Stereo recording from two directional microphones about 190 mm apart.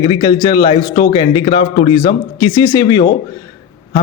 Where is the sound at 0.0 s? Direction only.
20° left (ahead or behind).